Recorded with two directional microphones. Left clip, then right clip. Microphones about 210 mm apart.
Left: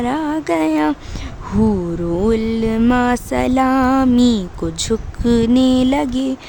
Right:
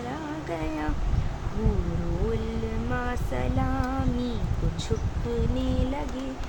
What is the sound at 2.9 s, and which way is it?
Mantra, 60° left (ahead or behind).